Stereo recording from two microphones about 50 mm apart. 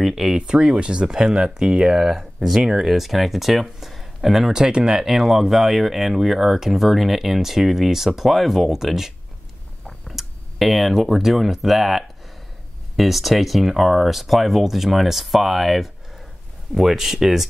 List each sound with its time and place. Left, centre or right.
0.0 s speech: centre
0.4 s speech: centre
4.5 s speech: centre